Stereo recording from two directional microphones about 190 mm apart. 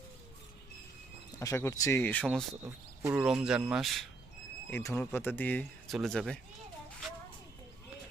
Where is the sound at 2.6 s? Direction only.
10° right (ahead or behind).